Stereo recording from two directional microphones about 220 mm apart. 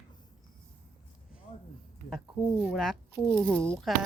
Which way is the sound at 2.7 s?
Centre (ahead or behind).